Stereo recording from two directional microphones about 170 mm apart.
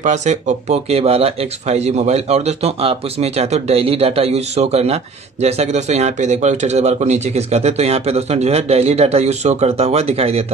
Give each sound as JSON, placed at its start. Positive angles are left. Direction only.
{"t": 0.0, "sound": "speech", "side_deg": -45}